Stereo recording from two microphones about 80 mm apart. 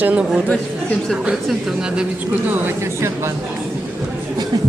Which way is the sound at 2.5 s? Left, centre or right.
Right.